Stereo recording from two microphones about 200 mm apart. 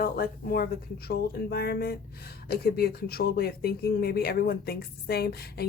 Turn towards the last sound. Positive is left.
turn(degrees=50)  # may be behind; listen again after turning